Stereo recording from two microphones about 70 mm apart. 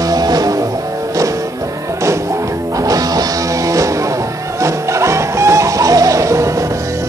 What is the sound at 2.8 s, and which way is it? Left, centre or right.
Music, right.